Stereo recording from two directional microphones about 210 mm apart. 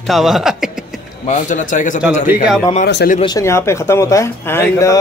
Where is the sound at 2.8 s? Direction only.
45° left (ahead or behind).